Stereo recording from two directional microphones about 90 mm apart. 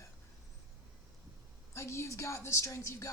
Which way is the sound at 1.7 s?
30° left (ahead or behind).